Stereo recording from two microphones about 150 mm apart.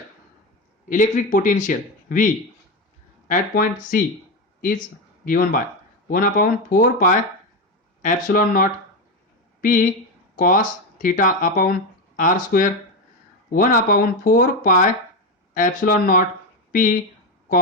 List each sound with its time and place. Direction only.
0.9 s a man's voice: 60° left (ahead or behind)
5.2 s speech: 70° left (ahead or behind)
13.5 s a man's voice: 70° left (ahead or behind)